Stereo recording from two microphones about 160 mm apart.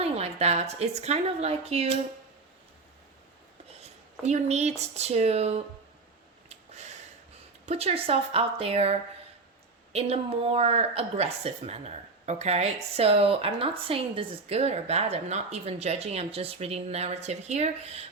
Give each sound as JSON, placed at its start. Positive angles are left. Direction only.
{"t": 0.0, "sound": "speech", "side_deg": -40}
{"t": 4.2, "sound": "speech", "side_deg": -45}
{"t": 7.7, "sound": "speech", "side_deg": -40}